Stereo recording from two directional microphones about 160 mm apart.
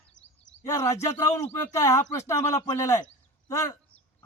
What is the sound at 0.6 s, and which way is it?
A man's voice, 20° left (ahead or behind).